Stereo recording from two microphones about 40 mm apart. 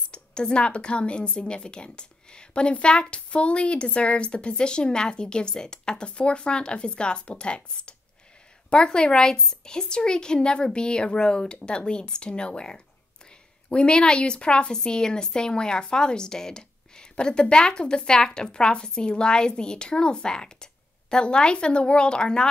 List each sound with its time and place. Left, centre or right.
0.1 s a woman's voice: left